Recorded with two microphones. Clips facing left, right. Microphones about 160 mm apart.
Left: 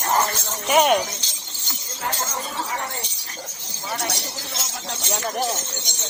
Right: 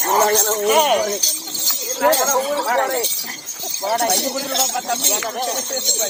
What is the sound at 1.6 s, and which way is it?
Speech, 90° right.